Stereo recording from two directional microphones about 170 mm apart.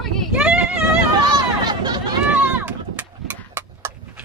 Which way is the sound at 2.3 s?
5° right (ahead or behind).